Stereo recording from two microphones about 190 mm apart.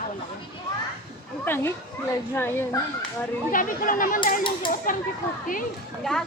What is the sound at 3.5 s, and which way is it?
Speech, 45° left (ahead or behind).